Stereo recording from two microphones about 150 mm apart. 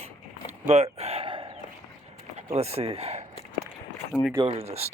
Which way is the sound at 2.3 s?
45° right (ahead or behind).